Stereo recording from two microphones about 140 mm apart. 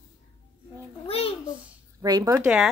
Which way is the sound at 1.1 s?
45° left (ahead or behind).